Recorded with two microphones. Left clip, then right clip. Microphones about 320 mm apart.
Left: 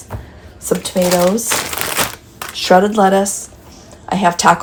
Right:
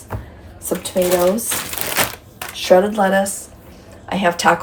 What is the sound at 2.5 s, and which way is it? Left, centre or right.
Speech, left.